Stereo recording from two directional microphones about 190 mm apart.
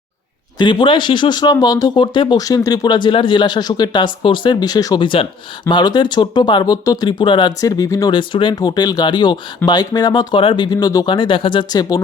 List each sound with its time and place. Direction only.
0.6 s speech: 25° left (ahead or behind)